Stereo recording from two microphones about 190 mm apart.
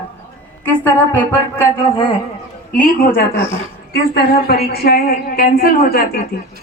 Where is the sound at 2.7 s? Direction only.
50° left (ahead or behind).